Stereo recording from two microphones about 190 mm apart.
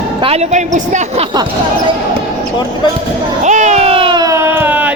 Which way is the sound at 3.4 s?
40° right (ahead or behind).